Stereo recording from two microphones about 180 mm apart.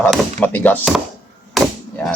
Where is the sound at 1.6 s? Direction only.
Centre (ahead or behind).